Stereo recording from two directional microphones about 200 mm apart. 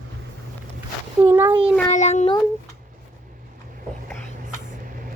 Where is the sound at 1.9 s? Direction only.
35° left (ahead or behind).